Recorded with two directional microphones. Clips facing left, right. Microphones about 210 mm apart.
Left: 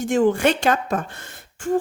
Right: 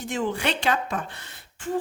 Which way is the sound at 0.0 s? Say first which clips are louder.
Left 9 dB; 50° left (ahead or behind).